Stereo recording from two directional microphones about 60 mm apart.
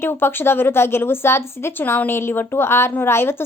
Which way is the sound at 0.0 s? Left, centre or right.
Left.